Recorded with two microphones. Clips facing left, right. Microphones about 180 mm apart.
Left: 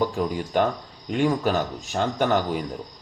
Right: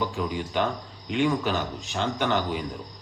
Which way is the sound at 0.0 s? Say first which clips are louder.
Left 4 dB; 40° left (ahead or behind).